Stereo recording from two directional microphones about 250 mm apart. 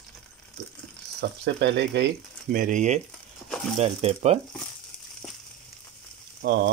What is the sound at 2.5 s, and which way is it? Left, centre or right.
Speech, right.